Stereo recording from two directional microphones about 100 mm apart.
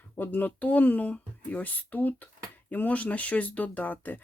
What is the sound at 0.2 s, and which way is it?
Speech, 20° left (ahead or behind).